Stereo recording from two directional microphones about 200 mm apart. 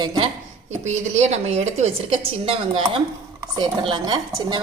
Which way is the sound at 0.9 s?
35° right (ahead or behind).